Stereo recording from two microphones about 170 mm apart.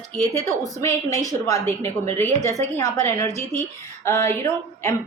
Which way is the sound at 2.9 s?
15° left (ahead or behind).